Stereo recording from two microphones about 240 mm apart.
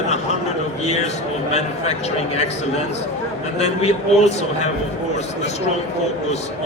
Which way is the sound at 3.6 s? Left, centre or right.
Left.